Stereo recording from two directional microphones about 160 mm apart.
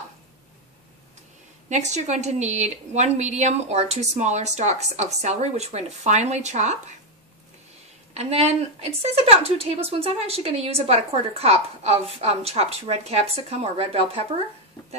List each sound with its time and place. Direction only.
1.7 s a woman's voice: 45° right (ahead or behind)
8.1 s a woman's voice: 40° right (ahead or behind)